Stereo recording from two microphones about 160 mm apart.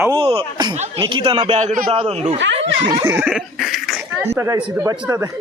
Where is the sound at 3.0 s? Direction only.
15° right (ahead or behind).